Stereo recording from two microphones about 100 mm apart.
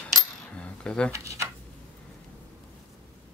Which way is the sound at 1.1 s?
30° right (ahead or behind).